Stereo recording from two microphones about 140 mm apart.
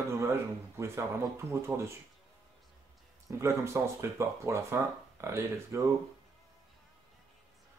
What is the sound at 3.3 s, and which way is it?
Speech, 20° right (ahead or behind).